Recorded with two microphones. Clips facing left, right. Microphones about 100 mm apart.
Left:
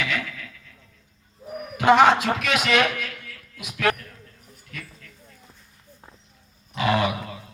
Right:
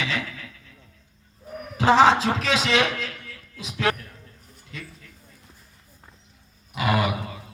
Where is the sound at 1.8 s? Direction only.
30° right (ahead or behind).